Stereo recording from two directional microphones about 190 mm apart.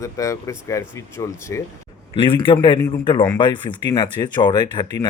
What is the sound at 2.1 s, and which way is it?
A man's voice, 30° left (ahead or behind).